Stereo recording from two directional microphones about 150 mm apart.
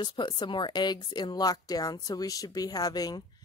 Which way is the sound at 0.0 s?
30° left (ahead or behind).